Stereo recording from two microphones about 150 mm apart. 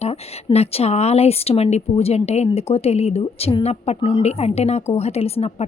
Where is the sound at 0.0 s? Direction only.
45° left (ahead or behind).